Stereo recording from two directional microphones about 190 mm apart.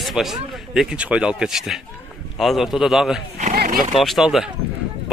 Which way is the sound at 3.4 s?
45° right (ahead or behind).